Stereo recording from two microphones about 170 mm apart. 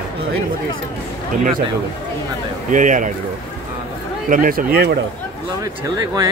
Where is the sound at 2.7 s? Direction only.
50° right (ahead or behind).